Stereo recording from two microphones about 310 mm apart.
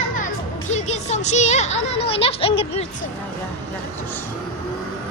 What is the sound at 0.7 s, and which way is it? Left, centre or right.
Speech, left.